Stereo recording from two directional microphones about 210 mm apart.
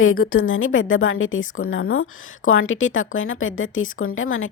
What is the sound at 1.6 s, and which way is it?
Speech, 80° left.